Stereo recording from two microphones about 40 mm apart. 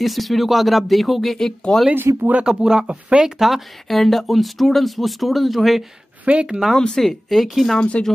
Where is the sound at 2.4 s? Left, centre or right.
Centre.